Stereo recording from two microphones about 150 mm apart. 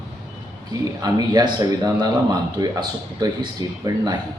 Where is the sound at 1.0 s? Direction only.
25° right (ahead or behind).